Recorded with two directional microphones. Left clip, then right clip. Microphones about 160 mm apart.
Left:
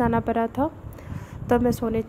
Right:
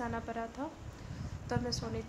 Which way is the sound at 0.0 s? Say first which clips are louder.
Left 16 dB; 50° left (ahead or behind).